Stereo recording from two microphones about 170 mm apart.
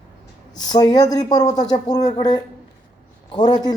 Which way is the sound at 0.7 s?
25° left (ahead or behind).